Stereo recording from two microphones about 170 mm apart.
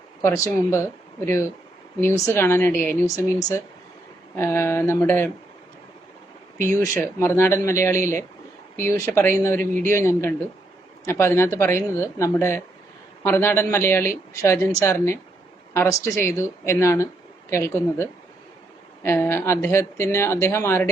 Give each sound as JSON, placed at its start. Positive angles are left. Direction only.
{"t": 0.2, "sound": "a man's voice", "side_deg": 15}
{"t": 6.7, "sound": "a man's voice", "side_deg": 15}